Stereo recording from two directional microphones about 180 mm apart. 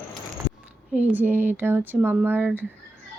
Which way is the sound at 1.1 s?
10° right (ahead or behind).